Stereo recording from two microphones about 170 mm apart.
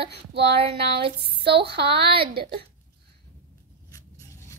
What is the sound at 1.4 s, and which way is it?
Speech, 75° right (ahead or behind).